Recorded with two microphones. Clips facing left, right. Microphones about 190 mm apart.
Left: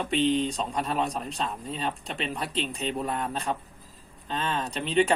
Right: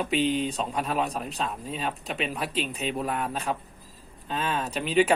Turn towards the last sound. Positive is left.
turn(degrees=-5)  # may be behind; listen again after turning